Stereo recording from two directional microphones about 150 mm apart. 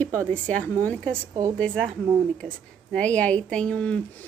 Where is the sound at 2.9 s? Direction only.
10° left (ahead or behind).